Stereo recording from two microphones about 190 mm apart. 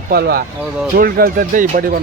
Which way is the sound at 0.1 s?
55° right (ahead or behind).